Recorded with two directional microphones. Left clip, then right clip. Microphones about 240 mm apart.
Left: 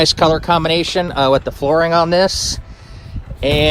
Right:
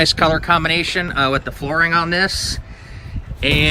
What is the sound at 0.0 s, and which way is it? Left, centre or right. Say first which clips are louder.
A man's voice: left 2 dB; left.